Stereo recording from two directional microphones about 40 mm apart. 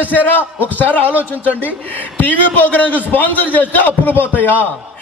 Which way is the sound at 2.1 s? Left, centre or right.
Left.